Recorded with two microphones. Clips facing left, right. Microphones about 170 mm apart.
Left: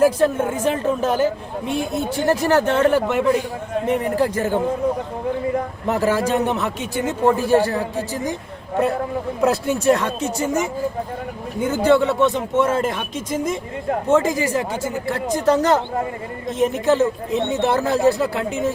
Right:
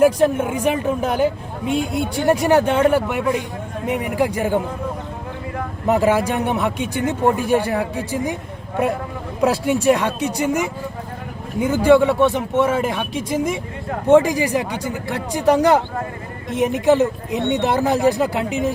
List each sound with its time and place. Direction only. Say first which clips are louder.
0.0 s speech: right 1 dB; 15° right (ahead or behind)
5.9 s speech: right 2 dB; 10° right (ahead or behind)
9.4 s speech: right 2 dB; 15° right (ahead or behind)